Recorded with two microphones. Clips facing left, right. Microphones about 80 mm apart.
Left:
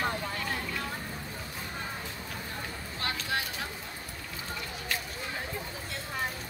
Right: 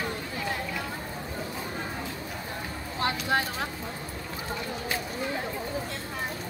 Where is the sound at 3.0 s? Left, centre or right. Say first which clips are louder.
Right 7 dB; right.